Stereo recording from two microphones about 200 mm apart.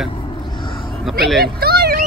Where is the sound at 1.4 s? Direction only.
50° right (ahead or behind).